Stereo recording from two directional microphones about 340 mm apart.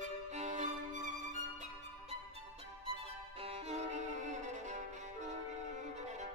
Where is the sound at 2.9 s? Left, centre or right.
Centre.